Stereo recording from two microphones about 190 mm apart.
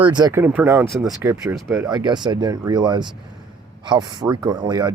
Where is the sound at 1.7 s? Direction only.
20° right (ahead or behind).